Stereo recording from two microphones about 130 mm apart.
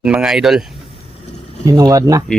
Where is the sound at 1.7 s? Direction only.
30° right (ahead or behind).